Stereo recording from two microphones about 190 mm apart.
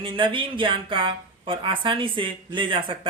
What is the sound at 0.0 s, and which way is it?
Speech, 25° right (ahead or behind).